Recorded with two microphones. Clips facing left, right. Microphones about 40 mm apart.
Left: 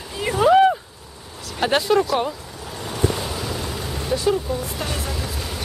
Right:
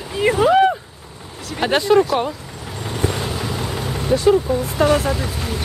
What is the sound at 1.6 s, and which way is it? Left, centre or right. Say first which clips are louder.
Speech: right 3 dB; centre.